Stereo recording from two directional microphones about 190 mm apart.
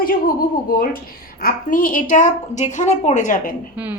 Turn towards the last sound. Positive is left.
turn(degrees=40)  # may be behind; listen again after turning